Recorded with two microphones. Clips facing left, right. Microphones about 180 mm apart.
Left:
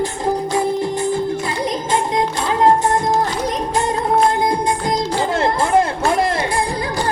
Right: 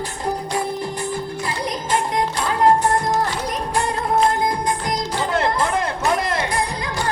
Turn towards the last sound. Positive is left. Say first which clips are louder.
# left 3 dB
turn(degrees=30)  # may be behind; listen again after turning